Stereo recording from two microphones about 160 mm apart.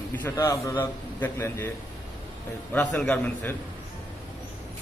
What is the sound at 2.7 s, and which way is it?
Speech, 10° left (ahead or behind).